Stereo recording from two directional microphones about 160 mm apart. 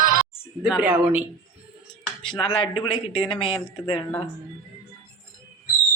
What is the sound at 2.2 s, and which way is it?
A man's voice, 35° left (ahead or behind).